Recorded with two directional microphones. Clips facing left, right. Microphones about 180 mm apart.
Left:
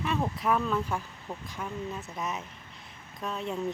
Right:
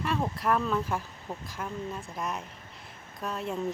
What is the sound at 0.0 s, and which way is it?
Speech, centre (ahead or behind).